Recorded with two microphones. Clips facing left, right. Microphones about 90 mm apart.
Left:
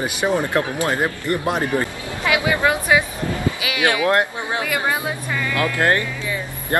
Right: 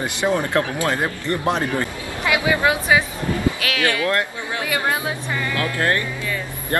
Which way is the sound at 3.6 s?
10° left (ahead or behind).